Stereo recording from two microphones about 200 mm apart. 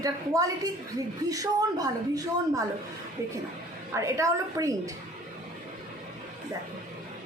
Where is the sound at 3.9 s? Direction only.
15° right (ahead or behind).